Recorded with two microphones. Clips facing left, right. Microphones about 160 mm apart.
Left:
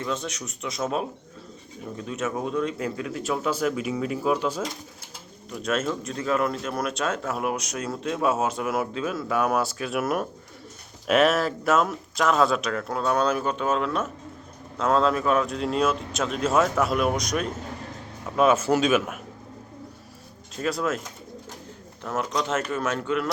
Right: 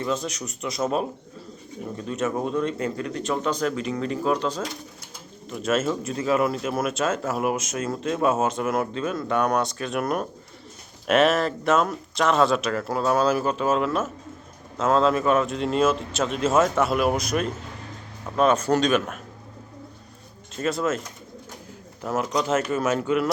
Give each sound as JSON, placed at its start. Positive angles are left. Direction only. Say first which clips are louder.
{"t": 0.0, "sound": "speech", "louder": "right 3 dB", "side_deg": 0}
{"t": 5.5, "sound": "speech", "louder": "right 3 dB", "side_deg": 0}
{"t": 20.6, "sound": "speech", "louder": "right 2 dB", "side_deg": 0}
{"t": 22.0, "sound": "speech", "louder": "right 3 dB", "side_deg": 0}